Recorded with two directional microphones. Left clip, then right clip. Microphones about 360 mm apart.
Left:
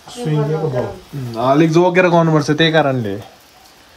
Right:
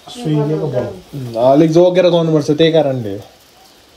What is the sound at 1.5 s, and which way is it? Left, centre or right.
A man's voice, centre.